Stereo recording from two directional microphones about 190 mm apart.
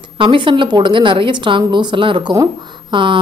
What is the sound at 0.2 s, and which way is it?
Speech, 25° right (ahead or behind).